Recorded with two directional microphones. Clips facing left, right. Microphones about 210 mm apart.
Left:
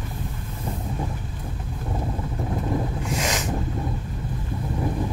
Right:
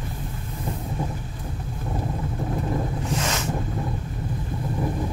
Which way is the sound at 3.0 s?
15° left (ahead or behind).